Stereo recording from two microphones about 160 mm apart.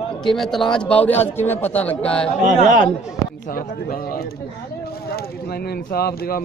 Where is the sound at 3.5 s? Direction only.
65° left (ahead or behind).